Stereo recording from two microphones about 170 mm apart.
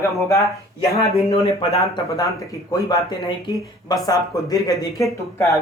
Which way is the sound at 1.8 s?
20° left (ahead or behind).